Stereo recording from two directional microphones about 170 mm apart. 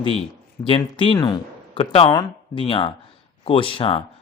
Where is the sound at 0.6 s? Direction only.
30° left (ahead or behind).